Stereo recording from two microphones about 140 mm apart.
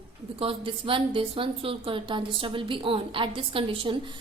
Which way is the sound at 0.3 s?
40° right (ahead or behind).